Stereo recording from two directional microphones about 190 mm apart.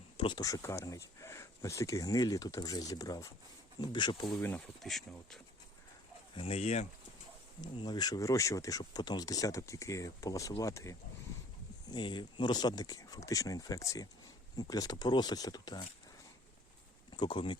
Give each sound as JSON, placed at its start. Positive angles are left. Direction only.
{"t": 0.2, "sound": "speech", "side_deg": 25}
{"t": 4.4, "sound": "speech", "side_deg": 10}
{"t": 6.3, "sound": "speech", "side_deg": 30}
{"t": 7.6, "sound": "speech", "side_deg": 20}
{"t": 17.2, "sound": "speech", "side_deg": 25}